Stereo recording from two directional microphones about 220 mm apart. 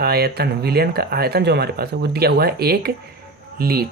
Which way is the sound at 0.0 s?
45° right (ahead or behind).